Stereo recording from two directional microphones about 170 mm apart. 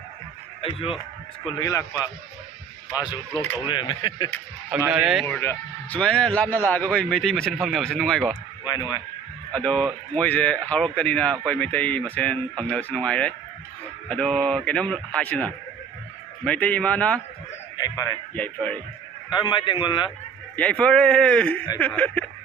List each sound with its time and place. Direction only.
0.6 s speech: 35° left (ahead or behind)
1.5 s a man's voice: 20° left (ahead or behind)
3.0 s a man's voice: 25° left (ahead or behind)
4.7 s speech: 10° right (ahead or behind)
5.2 s a man's voice: 15° left (ahead or behind)
8.6 s a man's voice: 25° left (ahead or behind)
9.5 s a man's voice: 5° left (ahead or behind)
17.7 s speech: 20° left (ahead or behind)
18.3 s a man's voice: 10° left (ahead or behind)
19.3 s a man's voice: 25° left (ahead or behind)
20.6 s a man's voice: 5° left (ahead or behind)